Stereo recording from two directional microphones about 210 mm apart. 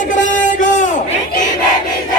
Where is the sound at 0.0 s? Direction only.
35° left (ahead or behind).